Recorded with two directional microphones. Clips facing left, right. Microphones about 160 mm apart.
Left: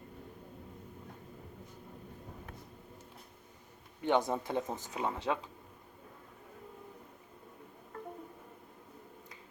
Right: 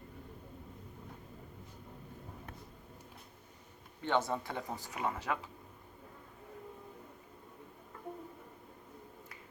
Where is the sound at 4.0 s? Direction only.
15° left (ahead or behind).